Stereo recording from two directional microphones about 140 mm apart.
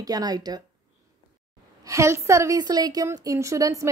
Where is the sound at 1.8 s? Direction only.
20° right (ahead or behind).